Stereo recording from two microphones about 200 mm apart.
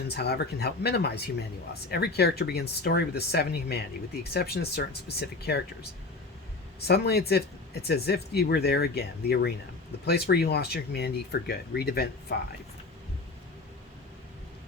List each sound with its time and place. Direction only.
0.1 s speech: 55° left (ahead or behind)
6.8 s speech: 55° left (ahead or behind)